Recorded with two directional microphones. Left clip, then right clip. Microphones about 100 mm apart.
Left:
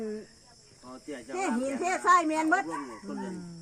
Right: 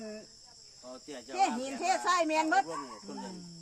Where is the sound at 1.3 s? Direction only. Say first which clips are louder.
Right 1 dB; 5° right (ahead or behind).